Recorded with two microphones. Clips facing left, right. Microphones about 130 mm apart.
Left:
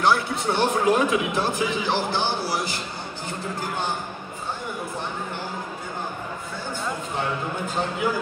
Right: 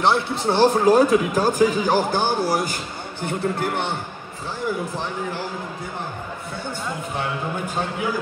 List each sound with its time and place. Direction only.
0.0 s speech: 25° right (ahead or behind); by 3.9 s 65° right (ahead or behind)